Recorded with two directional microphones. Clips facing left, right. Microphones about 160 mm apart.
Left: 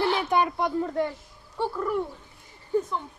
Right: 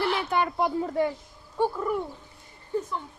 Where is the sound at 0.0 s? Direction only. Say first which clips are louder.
Left 2 dB; 25° left (ahead or behind).